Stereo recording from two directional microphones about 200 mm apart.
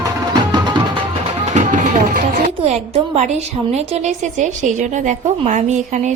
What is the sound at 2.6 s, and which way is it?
A woman's voice, 35° right (ahead or behind).